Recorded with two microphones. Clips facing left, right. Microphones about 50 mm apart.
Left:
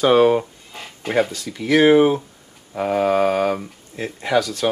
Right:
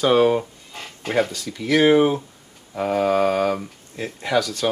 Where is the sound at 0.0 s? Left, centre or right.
Centre.